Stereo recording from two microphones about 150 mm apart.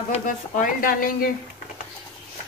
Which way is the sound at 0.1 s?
65° left (ahead or behind).